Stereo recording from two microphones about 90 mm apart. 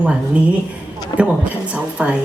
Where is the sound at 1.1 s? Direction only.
60° left (ahead or behind).